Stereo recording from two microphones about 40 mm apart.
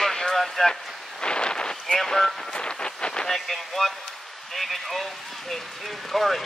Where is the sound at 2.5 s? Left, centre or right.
Left.